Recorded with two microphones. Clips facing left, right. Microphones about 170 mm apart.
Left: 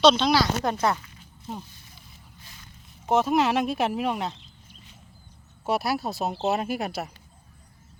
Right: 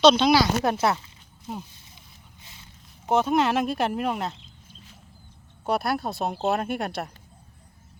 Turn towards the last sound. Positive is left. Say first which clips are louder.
# even
turn(degrees=5)  # may be behind; listen again after turning